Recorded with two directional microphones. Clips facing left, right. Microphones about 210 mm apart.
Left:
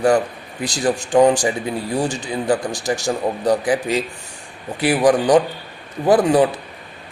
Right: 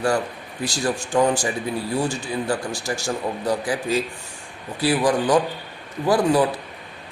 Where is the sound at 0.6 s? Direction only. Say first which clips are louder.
Left 4 dB; 20° left (ahead or behind).